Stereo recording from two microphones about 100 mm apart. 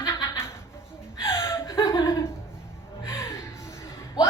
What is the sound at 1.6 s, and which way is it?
Laughter, 35° left (ahead or behind).